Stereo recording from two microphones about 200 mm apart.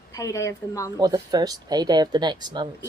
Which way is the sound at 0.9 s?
20° right (ahead or behind).